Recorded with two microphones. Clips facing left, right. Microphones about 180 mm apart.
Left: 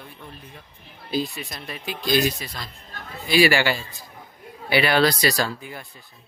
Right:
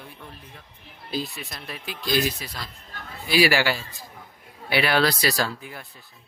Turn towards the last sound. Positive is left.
turn(degrees=0)  # may be behind; listen again after turning